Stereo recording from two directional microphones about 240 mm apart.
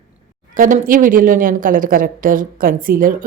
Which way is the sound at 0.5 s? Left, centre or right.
Right.